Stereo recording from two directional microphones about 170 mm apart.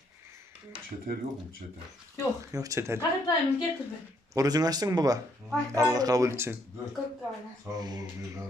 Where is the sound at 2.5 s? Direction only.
20° right (ahead or behind).